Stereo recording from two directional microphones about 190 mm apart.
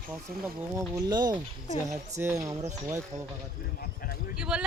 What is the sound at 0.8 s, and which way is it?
Speech, 20° right (ahead or behind).